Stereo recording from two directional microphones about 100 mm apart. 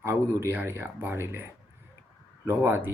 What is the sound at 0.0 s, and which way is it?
Speech, 25° right (ahead or behind).